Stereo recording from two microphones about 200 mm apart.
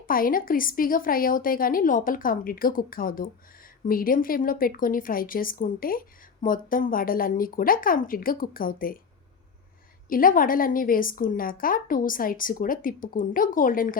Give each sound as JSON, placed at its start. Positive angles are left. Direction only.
{"t": 0.0, "sound": "a woman's voice", "side_deg": 45}
{"t": 10.1, "sound": "a woman's voice", "side_deg": 45}